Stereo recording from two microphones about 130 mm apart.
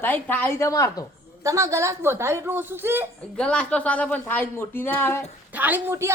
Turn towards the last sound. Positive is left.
turn(degrees=-20)  # may be behind; listen again after turning